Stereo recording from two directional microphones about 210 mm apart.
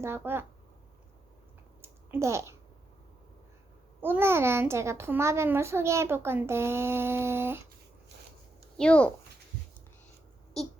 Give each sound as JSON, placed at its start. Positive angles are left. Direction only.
{"t": 0.0, "sound": "a child's voice", "side_deg": -10}
{"t": 1.8, "sound": "a sound", "side_deg": -10}
{"t": 4.0, "sound": "a child's voice", "side_deg": -10}
{"t": 8.8, "sound": "speech", "side_deg": 5}